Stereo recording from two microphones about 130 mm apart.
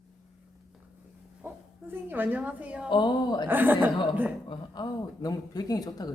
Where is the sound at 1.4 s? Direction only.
15° right (ahead or behind).